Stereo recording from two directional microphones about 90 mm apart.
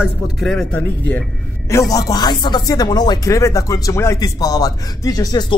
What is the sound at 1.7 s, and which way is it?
Speech, 35° left (ahead or behind).